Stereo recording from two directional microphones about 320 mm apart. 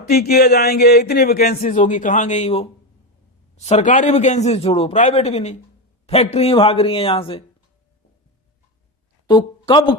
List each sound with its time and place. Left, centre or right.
0.1 s speech: left
9.2 s speech: centre